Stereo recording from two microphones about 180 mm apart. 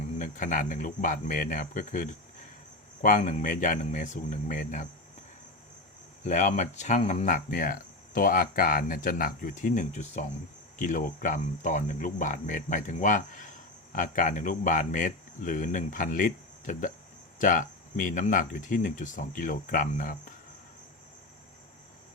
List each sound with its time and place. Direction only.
0.2 s speech: 45° left (ahead or behind)
6.2 s speech: 45° left (ahead or behind)